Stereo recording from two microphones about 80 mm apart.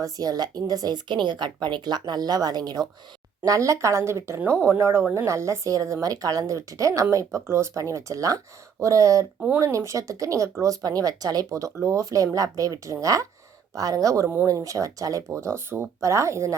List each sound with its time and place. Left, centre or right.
0.0 s speech: right
3.4 s a woman's voice: right